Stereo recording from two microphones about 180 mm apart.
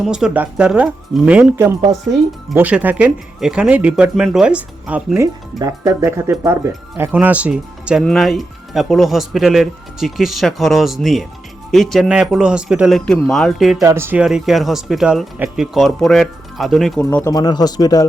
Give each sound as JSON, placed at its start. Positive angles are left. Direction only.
{"t": 0.0, "sound": "speech", "side_deg": -5}
{"t": 13.8, "sound": "speech", "side_deg": -15}
{"t": 17.0, "sound": "speech", "side_deg": 10}
{"t": 17.3, "sound": "speech", "side_deg": 20}